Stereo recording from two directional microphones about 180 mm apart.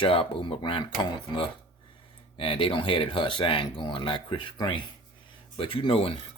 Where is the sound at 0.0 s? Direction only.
30° left (ahead or behind).